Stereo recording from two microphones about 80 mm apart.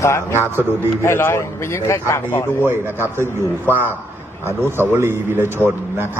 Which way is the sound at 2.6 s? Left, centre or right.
Right.